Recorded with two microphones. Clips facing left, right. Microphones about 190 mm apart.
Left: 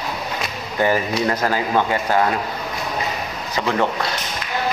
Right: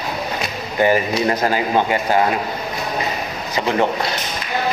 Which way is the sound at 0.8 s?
15° right (ahead or behind).